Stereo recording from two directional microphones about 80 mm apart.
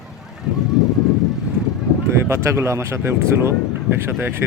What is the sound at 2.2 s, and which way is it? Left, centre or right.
Speech, right.